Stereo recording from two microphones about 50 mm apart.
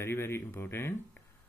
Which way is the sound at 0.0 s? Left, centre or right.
Left.